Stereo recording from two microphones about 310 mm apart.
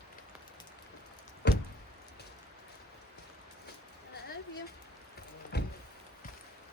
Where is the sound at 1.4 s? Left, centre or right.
Left.